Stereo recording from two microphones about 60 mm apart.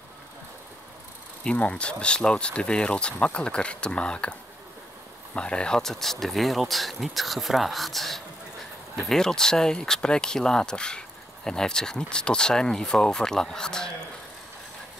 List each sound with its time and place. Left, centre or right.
1.4 s speech: left